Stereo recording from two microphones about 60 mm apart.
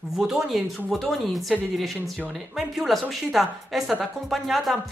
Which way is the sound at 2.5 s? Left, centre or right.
Centre.